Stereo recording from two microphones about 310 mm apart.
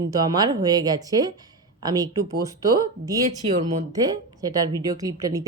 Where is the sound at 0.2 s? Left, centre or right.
Centre.